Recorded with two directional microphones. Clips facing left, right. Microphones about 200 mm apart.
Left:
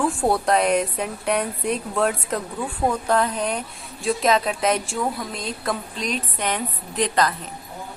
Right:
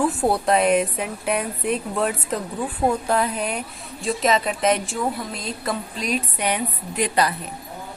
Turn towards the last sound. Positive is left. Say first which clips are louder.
# even
turn(degrees=-10)  # may be behind; listen again after turning